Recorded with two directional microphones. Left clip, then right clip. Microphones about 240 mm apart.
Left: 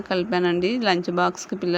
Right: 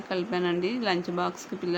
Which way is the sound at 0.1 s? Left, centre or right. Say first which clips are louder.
Left 6 dB; left.